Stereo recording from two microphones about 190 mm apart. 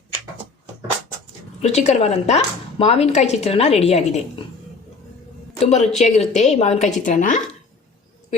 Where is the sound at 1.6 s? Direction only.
35° left (ahead or behind).